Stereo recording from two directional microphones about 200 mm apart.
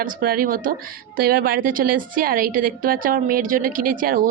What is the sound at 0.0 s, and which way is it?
A woman's voice, 45° right (ahead or behind).